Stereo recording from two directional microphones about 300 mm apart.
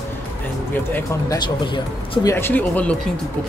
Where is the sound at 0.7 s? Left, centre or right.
Centre.